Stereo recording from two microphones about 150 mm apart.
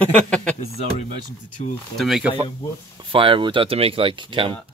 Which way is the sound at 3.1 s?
35° right (ahead or behind).